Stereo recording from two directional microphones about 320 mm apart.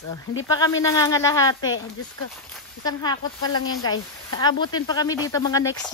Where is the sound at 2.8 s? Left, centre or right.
Centre.